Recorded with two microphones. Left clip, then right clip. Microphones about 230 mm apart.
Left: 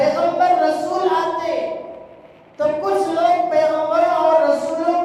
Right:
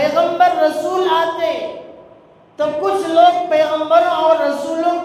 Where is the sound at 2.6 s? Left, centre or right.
Right.